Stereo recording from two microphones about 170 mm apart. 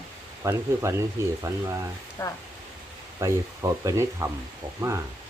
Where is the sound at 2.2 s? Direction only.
15° left (ahead or behind).